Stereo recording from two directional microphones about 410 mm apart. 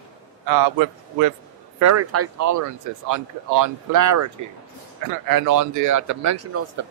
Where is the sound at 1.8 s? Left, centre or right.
Right.